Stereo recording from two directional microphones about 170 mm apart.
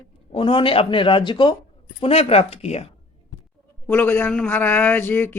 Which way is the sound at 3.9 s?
10° left (ahead or behind).